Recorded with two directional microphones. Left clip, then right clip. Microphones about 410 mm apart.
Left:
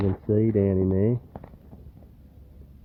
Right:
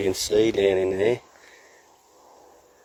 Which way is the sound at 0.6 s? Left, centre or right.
Centre.